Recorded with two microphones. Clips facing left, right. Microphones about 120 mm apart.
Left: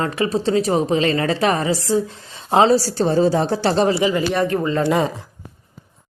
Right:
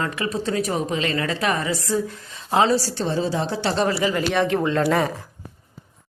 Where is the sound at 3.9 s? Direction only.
20° left (ahead or behind).